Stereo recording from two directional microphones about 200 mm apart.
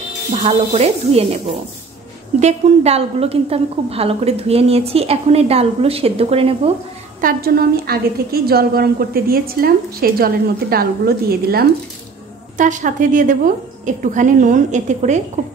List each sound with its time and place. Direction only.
0.3 s a woman's voice: 35° right (ahead or behind)
2.4 s a woman's voice: 30° right (ahead or behind)
7.2 s a woman's voice: 45° right (ahead or behind)
12.5 s a woman's voice: 40° right (ahead or behind)